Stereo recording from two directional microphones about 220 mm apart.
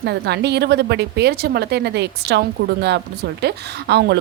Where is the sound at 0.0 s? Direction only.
50° right (ahead or behind).